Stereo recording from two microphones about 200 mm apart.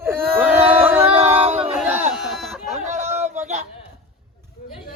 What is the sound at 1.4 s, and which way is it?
Battle cry, 30° right (ahead or behind).